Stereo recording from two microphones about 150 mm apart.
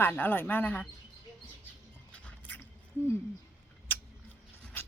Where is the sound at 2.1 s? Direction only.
10° left (ahead or behind).